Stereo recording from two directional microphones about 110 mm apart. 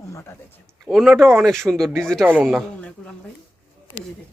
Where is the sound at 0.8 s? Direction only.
5° right (ahead or behind).